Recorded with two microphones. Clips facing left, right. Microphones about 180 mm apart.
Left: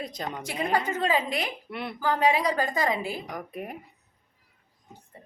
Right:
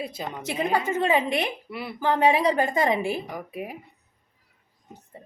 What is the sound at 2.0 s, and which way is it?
A woman's voice, 25° right (ahead or behind).